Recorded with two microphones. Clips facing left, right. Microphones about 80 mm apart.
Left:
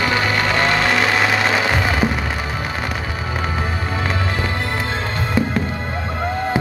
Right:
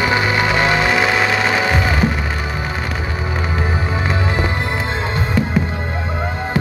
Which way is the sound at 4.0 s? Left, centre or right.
Centre.